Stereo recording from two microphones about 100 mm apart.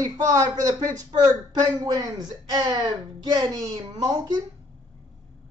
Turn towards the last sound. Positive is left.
turn(degrees=-45)  # may be behind; listen again after turning